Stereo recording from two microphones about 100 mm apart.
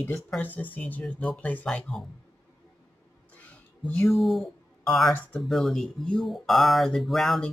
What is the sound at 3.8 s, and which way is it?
Speech, 15° left (ahead or behind).